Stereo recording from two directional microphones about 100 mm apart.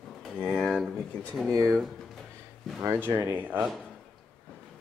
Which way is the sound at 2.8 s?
25° right (ahead or behind).